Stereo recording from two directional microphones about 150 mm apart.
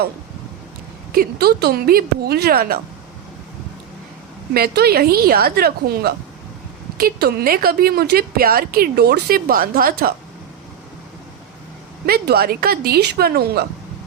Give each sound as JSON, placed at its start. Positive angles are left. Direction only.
{"t": 1.1, "sound": "speech", "side_deg": -90}
{"t": 4.5, "sound": "a woman's voice", "side_deg": -90}
{"t": 12.0, "sound": "speech", "side_deg": -90}